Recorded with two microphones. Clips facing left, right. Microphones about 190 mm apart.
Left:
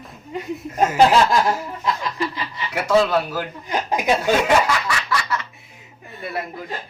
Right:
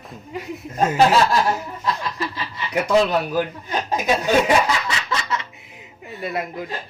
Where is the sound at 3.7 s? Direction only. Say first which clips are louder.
Left 3 dB; 15° left (ahead or behind).